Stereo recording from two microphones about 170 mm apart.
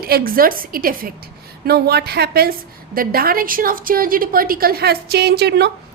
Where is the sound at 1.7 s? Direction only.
70° right (ahead or behind).